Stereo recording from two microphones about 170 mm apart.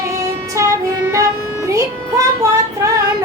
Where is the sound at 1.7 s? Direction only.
20° right (ahead or behind).